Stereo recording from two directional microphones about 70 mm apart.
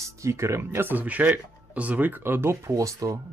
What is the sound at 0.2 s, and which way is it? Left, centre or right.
Speech, right.